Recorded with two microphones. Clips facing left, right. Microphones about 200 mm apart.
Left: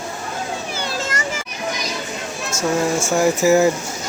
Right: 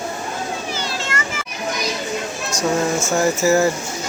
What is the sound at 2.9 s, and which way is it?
Speech, 15° left (ahead or behind).